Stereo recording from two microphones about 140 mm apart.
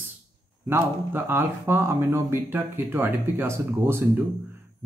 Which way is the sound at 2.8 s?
25° right (ahead or behind).